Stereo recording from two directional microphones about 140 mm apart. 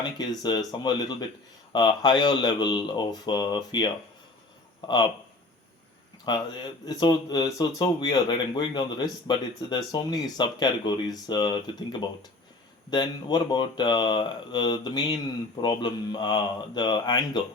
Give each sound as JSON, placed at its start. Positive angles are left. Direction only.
{"t": 0.0, "sound": "speech", "side_deg": 30}
{"t": 6.2, "sound": "speech", "side_deg": 30}